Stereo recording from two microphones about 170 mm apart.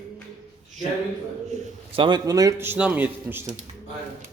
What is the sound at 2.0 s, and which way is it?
A man's voice, 25° right (ahead or behind).